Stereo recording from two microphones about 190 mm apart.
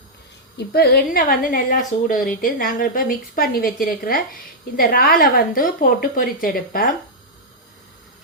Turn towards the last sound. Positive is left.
turn(degrees=50)  # may be behind; listen again after turning